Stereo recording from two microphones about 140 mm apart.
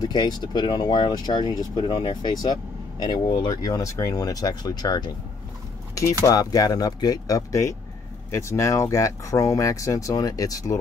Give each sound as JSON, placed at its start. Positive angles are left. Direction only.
{"t": 0.0, "sound": "speech", "side_deg": 30}
{"t": 6.2, "sound": "speech", "side_deg": 25}